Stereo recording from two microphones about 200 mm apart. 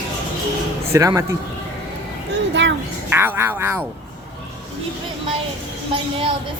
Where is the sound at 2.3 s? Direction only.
60° right (ahead or behind).